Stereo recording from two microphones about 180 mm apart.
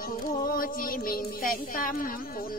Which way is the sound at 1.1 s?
50° left (ahead or behind).